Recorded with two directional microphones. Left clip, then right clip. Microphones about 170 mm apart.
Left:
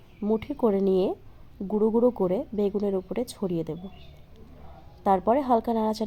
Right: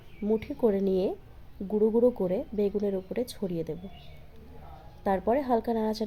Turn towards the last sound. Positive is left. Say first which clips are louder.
# left 3 dB
turn(degrees=15)  # may be behind; listen again after turning